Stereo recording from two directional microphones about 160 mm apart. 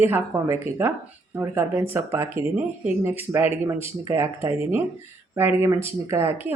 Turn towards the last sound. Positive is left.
turn(degrees=-15)  # may be behind; listen again after turning